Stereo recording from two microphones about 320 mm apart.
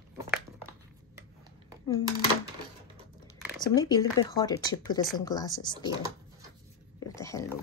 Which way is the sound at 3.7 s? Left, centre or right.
Centre.